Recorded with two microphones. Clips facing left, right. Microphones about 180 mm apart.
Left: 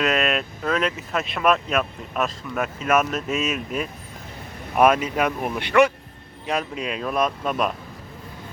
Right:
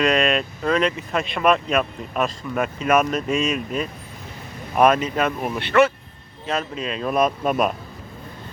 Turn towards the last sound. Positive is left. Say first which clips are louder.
# right 3 dB
turn(degrees=-5)  # may be behind; listen again after turning